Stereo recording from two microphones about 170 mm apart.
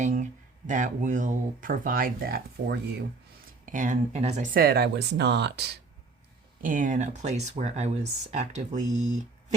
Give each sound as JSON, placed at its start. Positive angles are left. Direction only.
{"t": 0.0, "sound": "speech", "side_deg": -45}
{"t": 3.7, "sound": "speech", "side_deg": -50}
{"t": 4.5, "sound": "speech", "side_deg": -70}
{"t": 6.6, "sound": "speech", "side_deg": -50}